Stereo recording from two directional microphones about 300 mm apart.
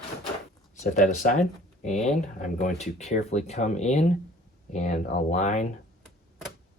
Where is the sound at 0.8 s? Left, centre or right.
Left.